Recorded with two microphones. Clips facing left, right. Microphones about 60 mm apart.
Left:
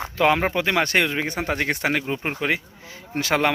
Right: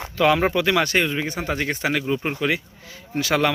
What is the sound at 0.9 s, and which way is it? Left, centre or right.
A man's voice, left.